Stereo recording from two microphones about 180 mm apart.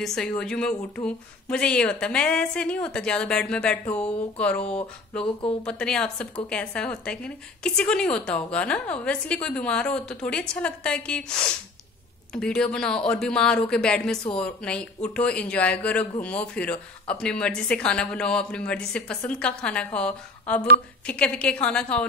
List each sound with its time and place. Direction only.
0.0 s speech: 5° left (ahead or behind)
5.2 s speech: 30° left (ahead or behind)
5.7 s speech: 5° left (ahead or behind)